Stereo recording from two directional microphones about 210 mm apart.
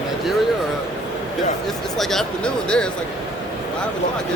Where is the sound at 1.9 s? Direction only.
Centre (ahead or behind).